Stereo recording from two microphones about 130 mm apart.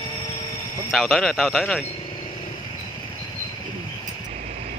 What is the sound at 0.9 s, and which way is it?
Speech, centre (ahead or behind).